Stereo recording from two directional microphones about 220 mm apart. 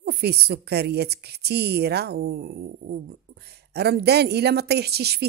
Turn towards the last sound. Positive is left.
turn(degrees=-45)  # may be behind; listen again after turning